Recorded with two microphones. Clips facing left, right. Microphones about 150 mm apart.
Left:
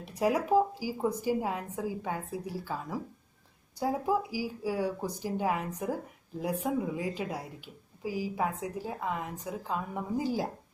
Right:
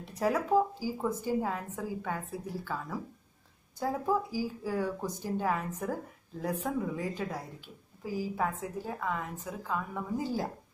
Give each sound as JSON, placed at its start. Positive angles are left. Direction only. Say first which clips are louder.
{"t": 0.0, "sound": "a woman's voice", "louder": "left 2 dB", "side_deg": 15}